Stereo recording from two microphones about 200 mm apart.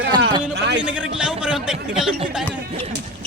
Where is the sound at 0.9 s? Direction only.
5° right (ahead or behind).